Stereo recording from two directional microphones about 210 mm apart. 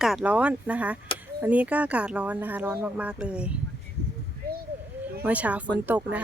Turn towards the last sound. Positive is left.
turn(degrees=-5)  # may be behind; listen again after turning